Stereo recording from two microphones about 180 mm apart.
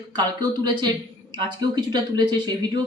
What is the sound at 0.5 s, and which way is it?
Speech, 25° right (ahead or behind).